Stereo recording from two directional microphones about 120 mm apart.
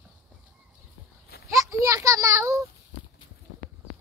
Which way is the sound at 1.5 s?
25° right (ahead or behind).